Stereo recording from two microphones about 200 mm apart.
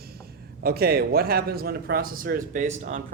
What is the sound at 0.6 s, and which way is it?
A man's voice, 50° right (ahead or behind).